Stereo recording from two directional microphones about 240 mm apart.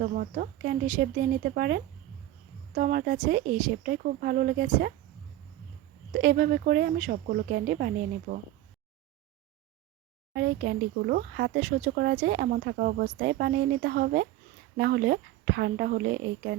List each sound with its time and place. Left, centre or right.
0.0 s speech: right
6.1 s speech: right
10.3 s speech: right